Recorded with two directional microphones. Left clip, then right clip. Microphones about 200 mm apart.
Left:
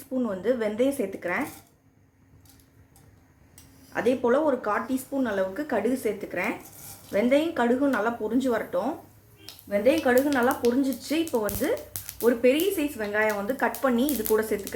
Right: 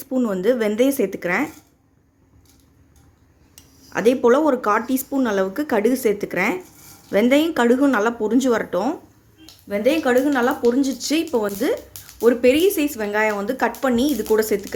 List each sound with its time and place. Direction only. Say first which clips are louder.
0.1 s speech: right 7 dB; 50° right (ahead or behind)
3.9 s speech: right 7 dB; 55° right (ahead or behind)